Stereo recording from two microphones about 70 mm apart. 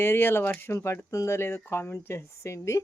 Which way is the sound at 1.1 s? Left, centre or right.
Left.